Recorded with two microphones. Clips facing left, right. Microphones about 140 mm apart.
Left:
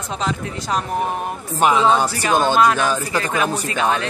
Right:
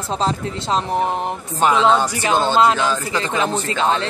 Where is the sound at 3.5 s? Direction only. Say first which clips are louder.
Right 1 dB; 15° left (ahead or behind).